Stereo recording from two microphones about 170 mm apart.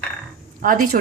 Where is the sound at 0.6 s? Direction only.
55° right (ahead or behind).